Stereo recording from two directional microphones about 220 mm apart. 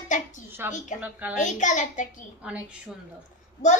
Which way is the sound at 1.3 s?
35° left (ahead or behind).